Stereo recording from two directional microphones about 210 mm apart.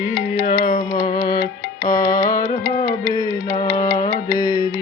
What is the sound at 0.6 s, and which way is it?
Music, 25° left (ahead or behind).